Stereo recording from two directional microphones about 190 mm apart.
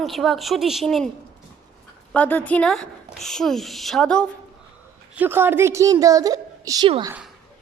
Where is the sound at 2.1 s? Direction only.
10° left (ahead or behind).